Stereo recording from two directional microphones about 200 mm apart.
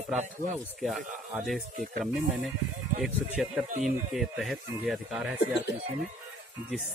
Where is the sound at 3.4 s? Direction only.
Centre (ahead or behind).